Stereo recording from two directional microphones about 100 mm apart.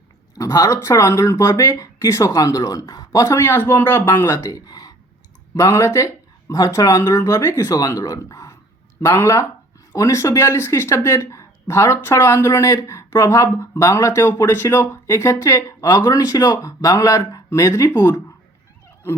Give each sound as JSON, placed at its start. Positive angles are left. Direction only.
{"t": 0.3, "sound": "speech", "side_deg": 30}
{"t": 4.2, "sound": "speech", "side_deg": 30}